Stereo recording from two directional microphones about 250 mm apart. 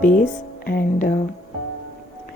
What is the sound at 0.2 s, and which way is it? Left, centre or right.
Speech, left.